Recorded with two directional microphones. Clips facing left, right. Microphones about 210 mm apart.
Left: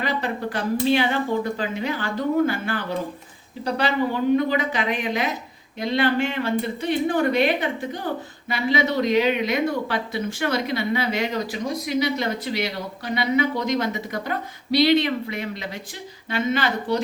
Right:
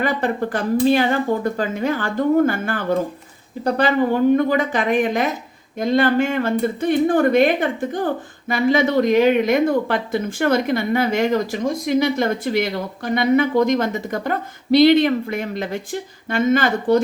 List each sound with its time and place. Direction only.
0.0 s speech: 50° right (ahead or behind)